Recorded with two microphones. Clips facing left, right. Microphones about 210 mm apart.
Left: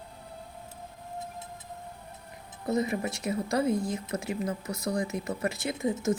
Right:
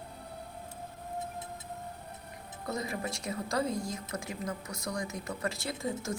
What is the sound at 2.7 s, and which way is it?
Speech, 20° left (ahead or behind).